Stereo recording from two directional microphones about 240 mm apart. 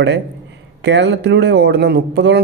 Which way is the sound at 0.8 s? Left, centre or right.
Right.